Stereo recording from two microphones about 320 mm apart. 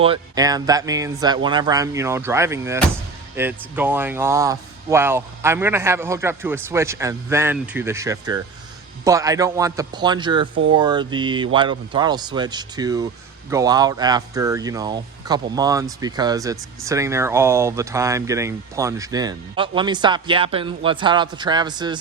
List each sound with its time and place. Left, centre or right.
0.0 s speech: centre